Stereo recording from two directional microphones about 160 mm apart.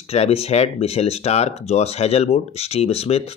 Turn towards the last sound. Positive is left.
turn(degrees=40)  # may be behind; listen again after turning